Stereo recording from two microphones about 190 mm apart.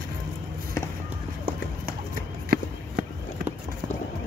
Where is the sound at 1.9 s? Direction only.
50° right (ahead or behind).